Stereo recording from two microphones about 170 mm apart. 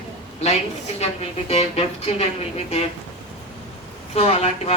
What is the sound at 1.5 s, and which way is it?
Speech, 35° left (ahead or behind).